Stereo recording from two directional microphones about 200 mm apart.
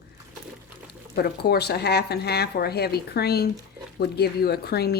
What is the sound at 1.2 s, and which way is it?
Speech, 50° left (ahead or behind).